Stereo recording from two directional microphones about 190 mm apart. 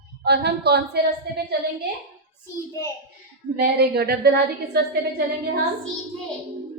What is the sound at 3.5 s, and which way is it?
A woman's voice, 55° right (ahead or behind).